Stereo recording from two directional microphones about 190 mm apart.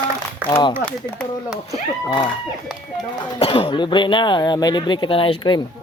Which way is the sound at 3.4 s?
30° left (ahead or behind).